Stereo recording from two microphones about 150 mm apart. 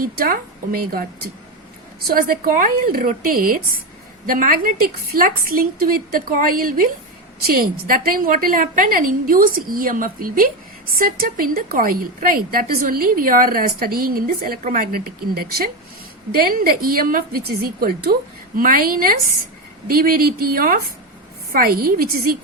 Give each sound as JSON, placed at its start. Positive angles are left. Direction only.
{"t": 0.0, "sound": "a woman's voice", "side_deg": -80}